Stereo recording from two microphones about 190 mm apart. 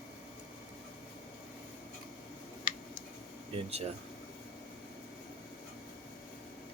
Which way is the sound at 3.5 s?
35° right (ahead or behind).